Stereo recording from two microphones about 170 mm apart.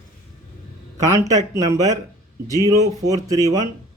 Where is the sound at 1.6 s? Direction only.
20° right (ahead or behind).